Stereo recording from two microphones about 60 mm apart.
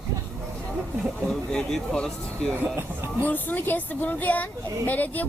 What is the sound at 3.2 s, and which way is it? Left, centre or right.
Speech, left.